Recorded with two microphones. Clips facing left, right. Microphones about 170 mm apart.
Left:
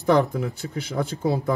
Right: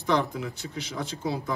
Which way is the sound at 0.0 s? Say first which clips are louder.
Left 6 dB; 55° left (ahead or behind).